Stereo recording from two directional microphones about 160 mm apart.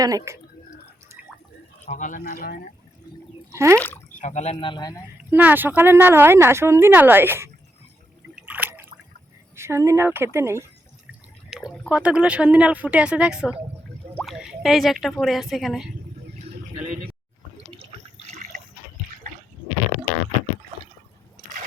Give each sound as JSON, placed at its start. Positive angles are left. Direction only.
{"t": 0.0, "sound": "speech", "side_deg": -20}
{"t": 1.8, "sound": "speech", "side_deg": 50}
{"t": 3.5, "sound": "speech", "side_deg": -20}
{"t": 3.8, "sound": "speech", "side_deg": 10}
{"t": 4.1, "sound": "speech", "side_deg": 50}
{"t": 4.6, "sound": "a man's voice", "side_deg": 25}
{"t": 5.3, "sound": "speech", "side_deg": -10}
{"t": 8.4, "sound": "a sound", "side_deg": -10}
{"t": 9.6, "sound": "speech", "side_deg": -15}
{"t": 11.5, "sound": "speech", "side_deg": 0}